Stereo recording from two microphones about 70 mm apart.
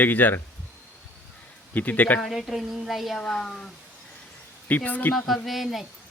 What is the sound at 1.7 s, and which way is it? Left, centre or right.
Chuckle, left.